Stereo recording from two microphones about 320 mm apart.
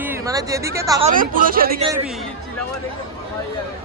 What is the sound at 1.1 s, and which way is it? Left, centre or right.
Speech, right.